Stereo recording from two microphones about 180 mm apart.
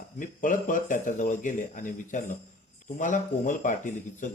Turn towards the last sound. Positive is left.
turn(degrees=45)  # may be behind; listen again after turning